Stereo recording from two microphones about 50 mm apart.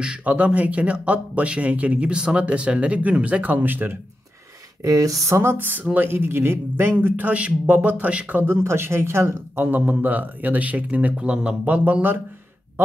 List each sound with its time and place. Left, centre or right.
0.0 s speech: right
3.6 s a man's voice: right
4.8 s speech: right
5.6 s a man's voice: right
7.3 s speech: right
8.4 s speech: right
9.7 s speech: right; by 11.5 s centre
11.6 s speech: right